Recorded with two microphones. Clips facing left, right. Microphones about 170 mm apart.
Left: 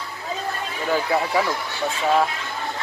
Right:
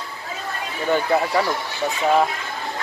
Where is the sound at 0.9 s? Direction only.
Centre (ahead or behind).